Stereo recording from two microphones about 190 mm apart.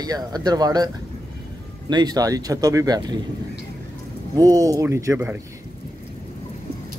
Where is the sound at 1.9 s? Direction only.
20° right (ahead or behind).